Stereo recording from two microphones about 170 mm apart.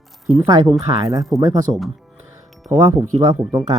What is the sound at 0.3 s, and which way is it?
Speech, 25° right (ahead or behind).